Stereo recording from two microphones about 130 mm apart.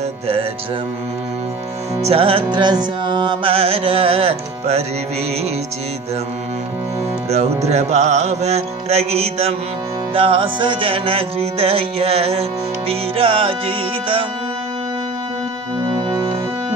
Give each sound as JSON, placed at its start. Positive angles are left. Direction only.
{"t": 2.0, "sound": "music", "side_deg": -50}
{"t": 7.2, "sound": "music", "side_deg": -55}